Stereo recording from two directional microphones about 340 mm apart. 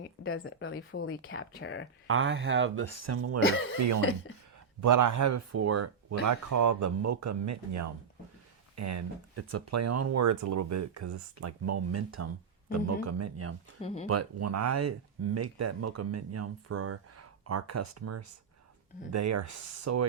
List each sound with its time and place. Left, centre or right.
0.0 s speech: left
2.0 s speech: right
3.4 s speech: left
4.8 s speech: right
13.8 s speech: centre
14.1 s speech: right